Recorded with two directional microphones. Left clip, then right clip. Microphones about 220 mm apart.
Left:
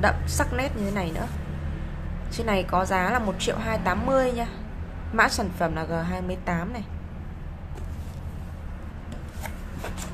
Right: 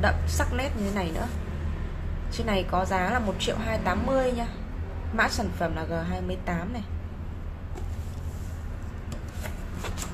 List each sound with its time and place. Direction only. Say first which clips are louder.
0.0 s a woman's voice: left 3 dB; 10° left (ahead or behind)
2.3 s a woman's voice: left 3 dB; 10° left (ahead or behind)